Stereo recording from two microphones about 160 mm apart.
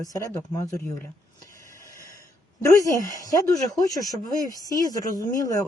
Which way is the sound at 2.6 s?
20° left (ahead or behind).